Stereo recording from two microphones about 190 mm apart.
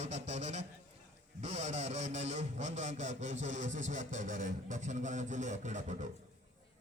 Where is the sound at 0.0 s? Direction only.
35° right (ahead or behind).